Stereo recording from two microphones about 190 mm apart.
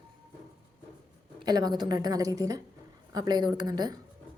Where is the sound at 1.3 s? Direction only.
20° right (ahead or behind).